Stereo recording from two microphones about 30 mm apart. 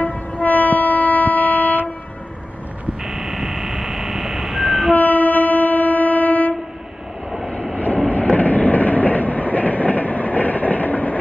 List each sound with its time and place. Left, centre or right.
0.0 s train: left
3.1 s train: centre
4.9 s train: left
7.7 s train: left